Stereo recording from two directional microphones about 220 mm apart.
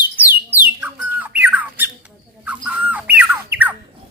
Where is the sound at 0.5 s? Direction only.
10° right (ahead or behind).